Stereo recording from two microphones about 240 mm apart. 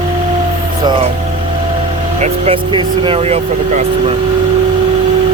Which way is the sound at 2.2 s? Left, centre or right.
Right.